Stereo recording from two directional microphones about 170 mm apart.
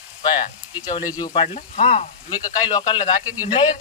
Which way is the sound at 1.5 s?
35° left (ahead or behind).